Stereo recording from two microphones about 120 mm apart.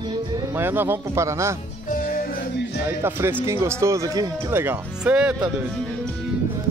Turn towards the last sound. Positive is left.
turn(degrees=-10)  # may be behind; listen again after turning